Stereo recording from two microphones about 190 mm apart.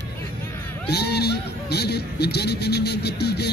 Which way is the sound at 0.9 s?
60° left (ahead or behind).